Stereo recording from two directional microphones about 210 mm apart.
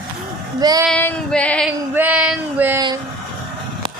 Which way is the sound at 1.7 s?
5° right (ahead or behind).